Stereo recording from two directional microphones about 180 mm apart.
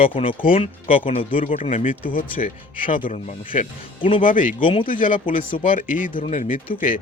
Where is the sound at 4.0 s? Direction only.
30° left (ahead or behind).